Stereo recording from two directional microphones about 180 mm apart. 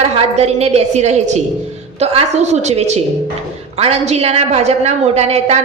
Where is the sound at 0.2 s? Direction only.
35° right (ahead or behind).